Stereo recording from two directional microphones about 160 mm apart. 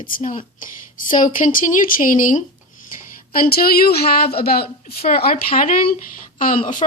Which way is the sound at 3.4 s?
70° left (ahead or behind).